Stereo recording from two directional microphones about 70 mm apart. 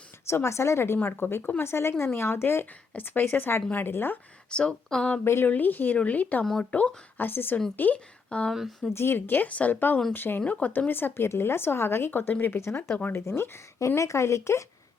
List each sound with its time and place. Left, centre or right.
0.3 s a woman's voice: left
4.5 s speech: centre
5.2 s a woman's voice: left
5.5 s a woman's voice: left
6.4 s speech: centre
6.7 s a woman's voice: left
8.5 s speech: centre
8.9 s a woman's voice: left
13.1 s speech: left